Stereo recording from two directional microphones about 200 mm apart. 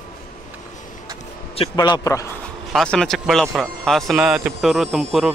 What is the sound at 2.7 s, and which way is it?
A man's voice, 5° left (ahead or behind).